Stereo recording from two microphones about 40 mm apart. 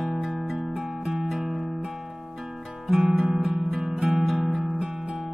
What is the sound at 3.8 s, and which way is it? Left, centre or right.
Music, centre.